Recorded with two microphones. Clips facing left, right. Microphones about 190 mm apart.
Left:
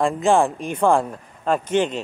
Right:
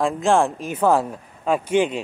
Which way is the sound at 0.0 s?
Centre (ahead or behind).